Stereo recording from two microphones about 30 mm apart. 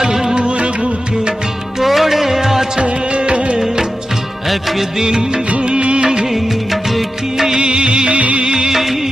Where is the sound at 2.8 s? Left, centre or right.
Right.